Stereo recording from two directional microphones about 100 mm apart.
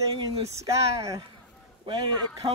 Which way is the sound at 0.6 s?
35° right (ahead or behind).